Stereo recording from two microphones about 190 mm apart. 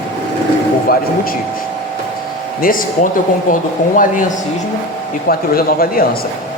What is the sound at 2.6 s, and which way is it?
Speech, 50° left (ahead or behind).